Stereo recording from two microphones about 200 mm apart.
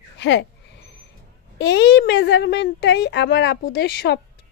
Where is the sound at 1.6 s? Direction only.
60° left (ahead or behind).